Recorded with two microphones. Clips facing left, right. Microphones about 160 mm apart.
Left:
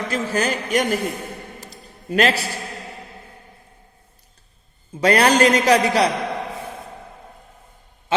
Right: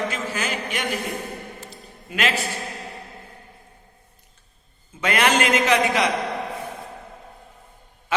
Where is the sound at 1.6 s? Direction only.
40° left (ahead or behind).